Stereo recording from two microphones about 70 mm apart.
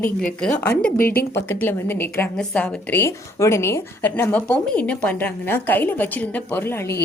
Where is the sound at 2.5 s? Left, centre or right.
Left.